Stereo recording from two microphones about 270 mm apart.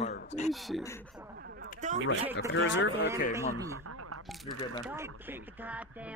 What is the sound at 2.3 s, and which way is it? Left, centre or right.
Speech, left.